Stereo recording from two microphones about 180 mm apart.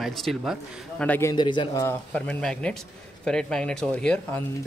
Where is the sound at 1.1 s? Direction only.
15° left (ahead or behind).